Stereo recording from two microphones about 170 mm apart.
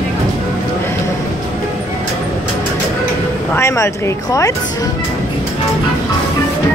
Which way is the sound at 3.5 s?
15° left (ahead or behind).